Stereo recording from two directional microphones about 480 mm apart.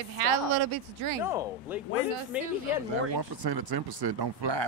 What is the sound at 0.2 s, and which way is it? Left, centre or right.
Speech, right.